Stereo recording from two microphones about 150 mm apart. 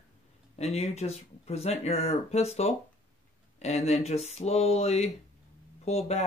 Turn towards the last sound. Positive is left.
turn(degrees=45)  # may be behind; listen again after turning